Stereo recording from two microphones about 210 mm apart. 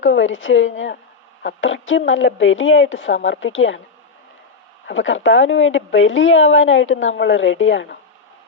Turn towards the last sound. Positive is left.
turn(degrees=60)  # may be behind; listen again after turning